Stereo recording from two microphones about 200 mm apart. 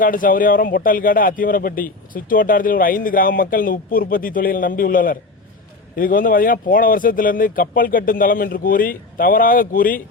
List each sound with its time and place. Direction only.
0.0 s speech: 45° left (ahead or behind)